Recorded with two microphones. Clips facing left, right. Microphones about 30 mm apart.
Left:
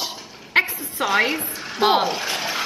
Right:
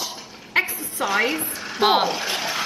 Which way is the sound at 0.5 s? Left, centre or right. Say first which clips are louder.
Left 3 dB; left.